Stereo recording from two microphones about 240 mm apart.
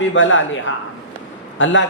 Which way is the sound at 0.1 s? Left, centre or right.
Left.